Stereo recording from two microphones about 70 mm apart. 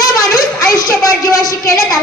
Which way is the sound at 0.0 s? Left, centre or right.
Left.